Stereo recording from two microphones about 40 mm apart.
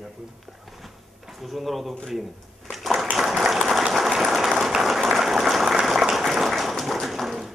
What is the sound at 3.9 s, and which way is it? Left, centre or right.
Applause, centre.